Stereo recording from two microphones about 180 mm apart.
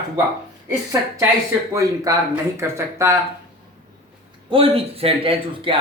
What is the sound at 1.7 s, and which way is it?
Speech, 20° right (ahead or behind).